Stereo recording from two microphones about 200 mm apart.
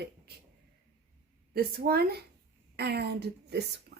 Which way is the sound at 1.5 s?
50° right (ahead or behind).